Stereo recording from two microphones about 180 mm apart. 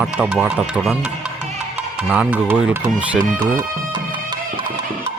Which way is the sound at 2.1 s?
10° right (ahead or behind).